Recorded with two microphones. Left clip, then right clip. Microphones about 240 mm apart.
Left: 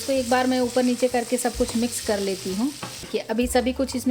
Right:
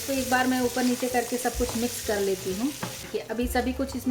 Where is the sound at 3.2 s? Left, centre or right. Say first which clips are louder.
Left 6 dB; left.